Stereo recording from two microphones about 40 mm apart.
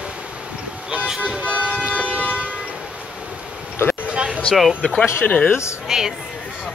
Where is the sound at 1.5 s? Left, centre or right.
Left.